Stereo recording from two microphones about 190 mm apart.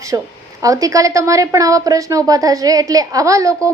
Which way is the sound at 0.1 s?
15° right (ahead or behind).